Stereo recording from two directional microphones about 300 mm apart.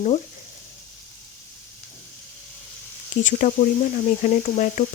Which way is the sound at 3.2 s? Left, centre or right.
Left.